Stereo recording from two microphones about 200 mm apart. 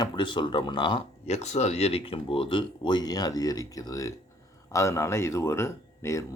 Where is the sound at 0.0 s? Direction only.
20° left (ahead or behind).